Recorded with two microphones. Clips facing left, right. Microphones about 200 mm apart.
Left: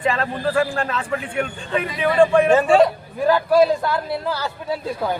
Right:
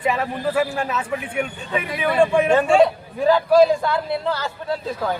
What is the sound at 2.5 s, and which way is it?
Speech, 5° left (ahead or behind).